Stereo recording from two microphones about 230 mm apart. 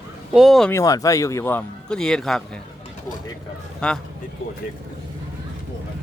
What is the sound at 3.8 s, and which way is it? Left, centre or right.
Speech, centre.